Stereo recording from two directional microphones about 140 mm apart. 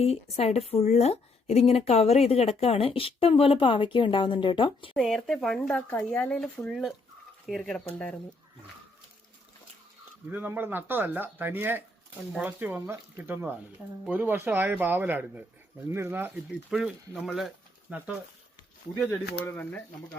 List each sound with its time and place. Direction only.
0.0 s a woman's voice: 45° left (ahead or behind)
4.9 s speech: centre (ahead or behind)
10.2 s speech: 15° right (ahead or behind)
19.5 s speech: 15° left (ahead or behind)